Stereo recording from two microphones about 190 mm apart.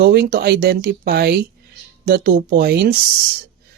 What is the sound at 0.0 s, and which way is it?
Speech, 55° right (ahead or behind).